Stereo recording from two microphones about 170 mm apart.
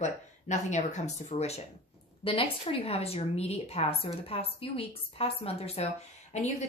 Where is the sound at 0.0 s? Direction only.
45° left (ahead or behind).